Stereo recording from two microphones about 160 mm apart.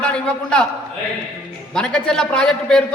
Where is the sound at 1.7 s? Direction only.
5° left (ahead or behind).